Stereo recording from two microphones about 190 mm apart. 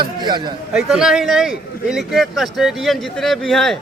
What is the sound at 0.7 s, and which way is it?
Speech, 5° right (ahead or behind).